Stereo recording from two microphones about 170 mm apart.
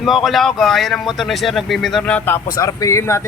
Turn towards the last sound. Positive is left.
turn(degrees=15)  # may be behind; listen again after turning